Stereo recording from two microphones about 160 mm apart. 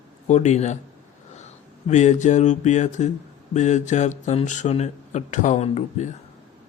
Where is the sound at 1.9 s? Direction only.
45° left (ahead or behind).